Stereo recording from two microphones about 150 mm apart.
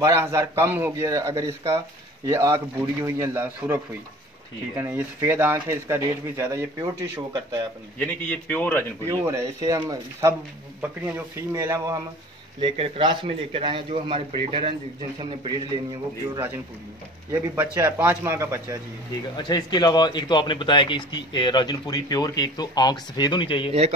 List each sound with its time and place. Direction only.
0.0 s a man's voice: 20° right (ahead or behind)
8.0 s a man's voice: 10° left (ahead or behind)
9.0 s a man's voice: 20° right (ahead or behind)
10.8 s a man's voice: 15° right (ahead or behind)
12.5 s a man's voice: 35° right (ahead or behind)
17.7 s a man's voice: 15° right (ahead or behind)
19.3 s speech: 30° left (ahead or behind)